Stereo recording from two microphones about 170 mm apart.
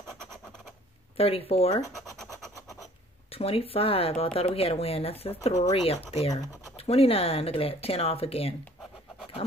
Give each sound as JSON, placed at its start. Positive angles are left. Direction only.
{"t": 1.1, "sound": "speech", "side_deg": 35}
{"t": 3.3, "sound": "speech", "side_deg": 35}